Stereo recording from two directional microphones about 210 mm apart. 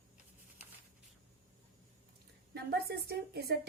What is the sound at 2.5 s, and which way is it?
A woman's voice, 50° right (ahead or behind).